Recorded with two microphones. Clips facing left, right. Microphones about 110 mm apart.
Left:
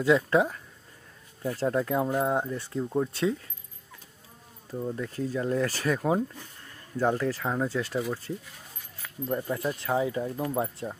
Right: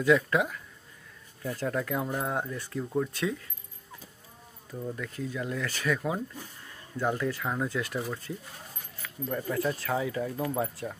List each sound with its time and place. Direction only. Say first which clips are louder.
0.0 s speech: left 2 dB; 25° left (ahead or behind)
4.6 s speech: left 4 dB; 25° left (ahead or behind)
9.3 s speech: even; 20° left (ahead or behind)